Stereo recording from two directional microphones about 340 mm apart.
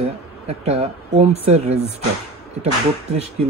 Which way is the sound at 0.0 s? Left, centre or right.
Centre.